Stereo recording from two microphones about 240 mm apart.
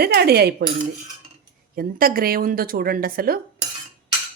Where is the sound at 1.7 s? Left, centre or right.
Right.